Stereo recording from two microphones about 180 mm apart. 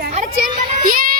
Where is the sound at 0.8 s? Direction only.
50° right (ahead or behind).